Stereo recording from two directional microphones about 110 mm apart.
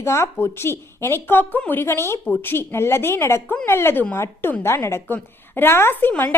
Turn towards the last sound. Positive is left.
turn(degrees=20)  # may be behind; listen again after turning